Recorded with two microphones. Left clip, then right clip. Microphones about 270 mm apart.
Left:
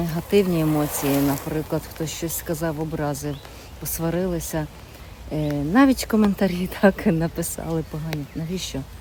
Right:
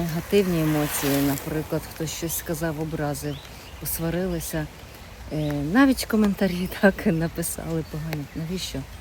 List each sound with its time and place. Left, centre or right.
0.0 s speech: centre
0.9 s speech: left
1.3 s speech: centre